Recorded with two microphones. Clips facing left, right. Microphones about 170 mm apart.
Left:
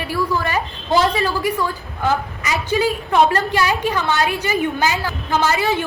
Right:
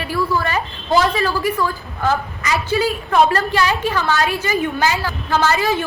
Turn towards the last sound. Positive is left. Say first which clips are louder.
# right 1 dB
turn(degrees=15)  # may be behind; listen again after turning